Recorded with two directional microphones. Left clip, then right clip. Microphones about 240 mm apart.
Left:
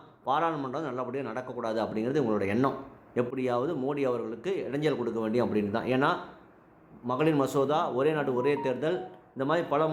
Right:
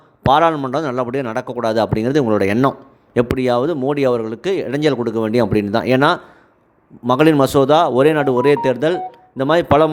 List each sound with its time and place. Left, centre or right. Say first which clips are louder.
0.3 s speech: right 15 dB; right